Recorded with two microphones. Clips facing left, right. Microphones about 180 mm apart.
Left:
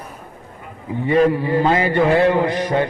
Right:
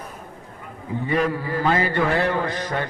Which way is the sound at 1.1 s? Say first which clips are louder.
Left 8 dB; 25° left (ahead or behind).